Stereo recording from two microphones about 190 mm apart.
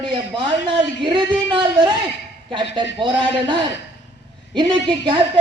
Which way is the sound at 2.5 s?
25° right (ahead or behind).